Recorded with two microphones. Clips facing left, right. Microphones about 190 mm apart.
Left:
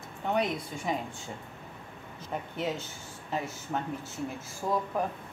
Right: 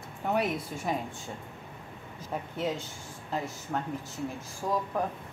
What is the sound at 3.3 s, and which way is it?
Speech, centre (ahead or behind).